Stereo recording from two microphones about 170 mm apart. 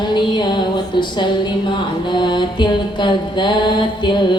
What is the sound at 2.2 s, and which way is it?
Mantra, 25° left (ahead or behind).